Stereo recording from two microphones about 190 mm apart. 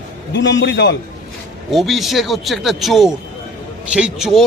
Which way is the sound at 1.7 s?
Centre (ahead or behind).